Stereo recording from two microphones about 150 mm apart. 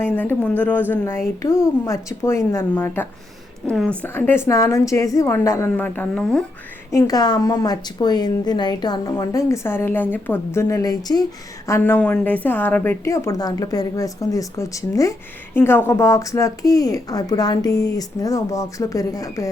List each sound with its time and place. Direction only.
0.0 s a woman's voice: 10° left (ahead or behind)
6.9 s a woman's voice: 25° left (ahead or behind)